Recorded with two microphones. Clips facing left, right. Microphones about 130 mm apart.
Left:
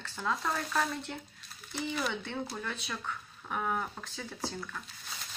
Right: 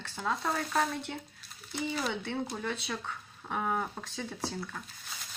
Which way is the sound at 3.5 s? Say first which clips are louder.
Right 1 dB; 25° right (ahead or behind).